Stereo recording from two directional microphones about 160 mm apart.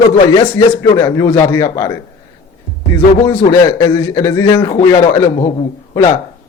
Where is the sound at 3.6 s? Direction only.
20° left (ahead or behind).